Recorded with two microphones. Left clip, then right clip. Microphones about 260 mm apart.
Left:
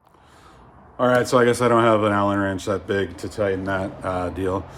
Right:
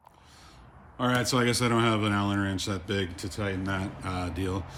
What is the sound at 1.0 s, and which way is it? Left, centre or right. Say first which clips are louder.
Speech: left 9 dB; centre.